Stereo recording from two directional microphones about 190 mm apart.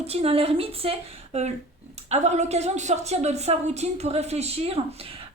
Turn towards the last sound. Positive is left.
turn(degrees=-30)  # may be behind; listen again after turning